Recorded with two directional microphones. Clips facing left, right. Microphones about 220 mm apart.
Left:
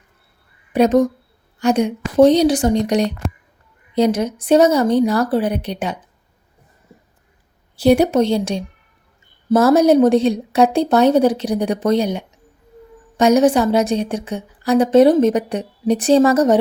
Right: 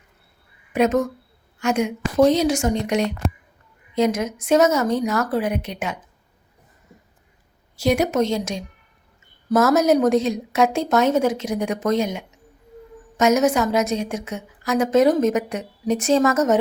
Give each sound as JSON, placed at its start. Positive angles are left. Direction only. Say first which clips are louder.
{"t": 0.7, "sound": "a woman's voice", "louder": "left 5 dB", "side_deg": 35}
{"t": 7.8, "sound": "a woman's voice", "louder": "left 6 dB", "side_deg": 30}